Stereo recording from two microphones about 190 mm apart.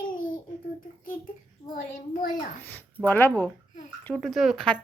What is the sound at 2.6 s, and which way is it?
Speech, 10° left (ahead or behind).